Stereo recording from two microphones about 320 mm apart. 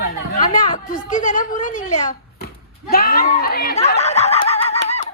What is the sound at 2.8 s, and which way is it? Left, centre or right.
Speech, left.